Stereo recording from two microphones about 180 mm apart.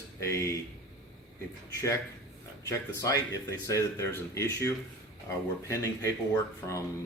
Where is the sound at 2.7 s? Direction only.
20° left (ahead or behind).